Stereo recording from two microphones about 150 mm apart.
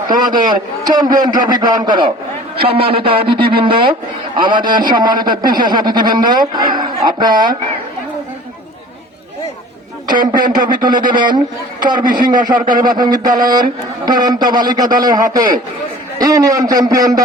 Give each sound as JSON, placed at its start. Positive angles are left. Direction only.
{"t": 0.4, "sound": "a man's voice", "side_deg": -25}
{"t": 10.1, "sound": "a man's voice", "side_deg": -30}